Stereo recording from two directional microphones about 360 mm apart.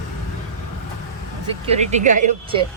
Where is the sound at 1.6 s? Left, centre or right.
Centre.